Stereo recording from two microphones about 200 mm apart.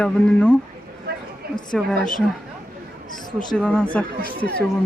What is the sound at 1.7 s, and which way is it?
Speech, centre (ahead or behind).